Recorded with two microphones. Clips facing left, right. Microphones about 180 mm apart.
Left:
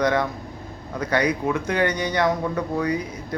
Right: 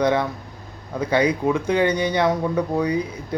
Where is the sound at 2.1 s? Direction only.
10° right (ahead or behind).